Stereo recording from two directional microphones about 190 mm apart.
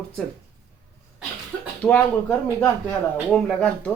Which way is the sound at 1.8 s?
5° left (ahead or behind).